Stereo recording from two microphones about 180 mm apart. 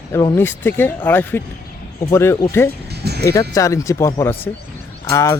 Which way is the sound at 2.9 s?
65° right (ahead or behind).